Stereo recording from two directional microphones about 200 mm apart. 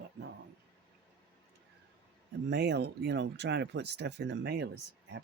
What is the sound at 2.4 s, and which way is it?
Speech, 60° right (ahead or behind).